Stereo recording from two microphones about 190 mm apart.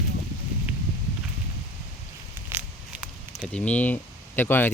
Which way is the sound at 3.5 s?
5° left (ahead or behind).